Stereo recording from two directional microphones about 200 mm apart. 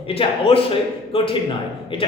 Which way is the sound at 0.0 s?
30° left (ahead or behind).